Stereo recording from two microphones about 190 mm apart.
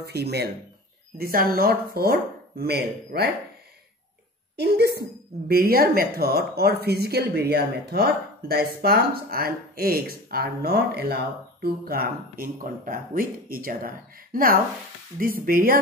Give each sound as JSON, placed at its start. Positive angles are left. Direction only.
{"t": 0.0, "sound": "speech", "side_deg": -60}
{"t": 4.6, "sound": "speech", "side_deg": -60}